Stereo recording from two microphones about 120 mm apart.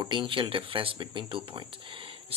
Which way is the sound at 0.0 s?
40° right (ahead or behind).